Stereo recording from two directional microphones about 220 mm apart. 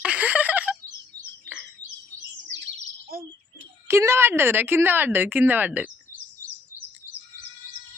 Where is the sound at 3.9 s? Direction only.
10° right (ahead or behind).